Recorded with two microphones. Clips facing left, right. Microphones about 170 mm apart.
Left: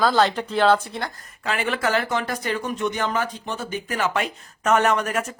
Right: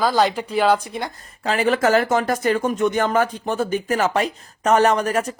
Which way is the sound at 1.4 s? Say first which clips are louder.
Right 6 dB; 35° right (ahead or behind).